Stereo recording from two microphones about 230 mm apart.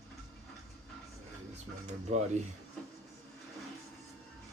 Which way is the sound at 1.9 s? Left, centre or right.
Right.